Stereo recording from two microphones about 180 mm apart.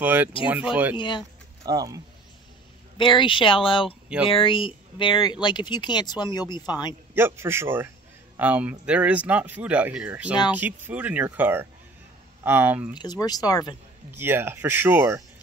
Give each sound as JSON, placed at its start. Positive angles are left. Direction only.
{"t": 0.0, "sound": "speech", "side_deg": -10}
{"t": 0.9, "sound": "speech", "side_deg": 25}
{"t": 1.7, "sound": "speech", "side_deg": -20}
{"t": 3.0, "sound": "speech", "side_deg": 25}
{"t": 7.2, "sound": "speech", "side_deg": -15}
{"t": 12.9, "sound": "speech", "side_deg": 25}
{"t": 14.1, "sound": "speech", "side_deg": -10}